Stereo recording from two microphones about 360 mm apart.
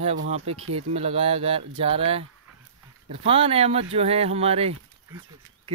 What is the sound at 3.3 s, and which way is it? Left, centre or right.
Speech, centre.